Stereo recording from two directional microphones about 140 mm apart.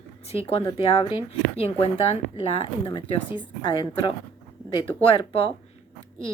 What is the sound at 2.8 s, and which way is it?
A woman's voice, 35° left (ahead or behind).